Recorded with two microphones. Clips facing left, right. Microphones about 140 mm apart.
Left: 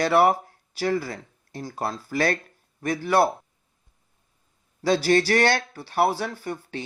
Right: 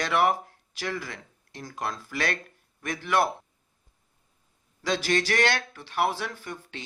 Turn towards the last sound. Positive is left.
turn(degrees=35)  # may be behind; listen again after turning